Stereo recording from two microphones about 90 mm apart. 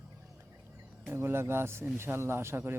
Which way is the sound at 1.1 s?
25° right (ahead or behind).